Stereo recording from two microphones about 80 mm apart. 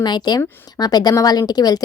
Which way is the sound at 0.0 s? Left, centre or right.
Left.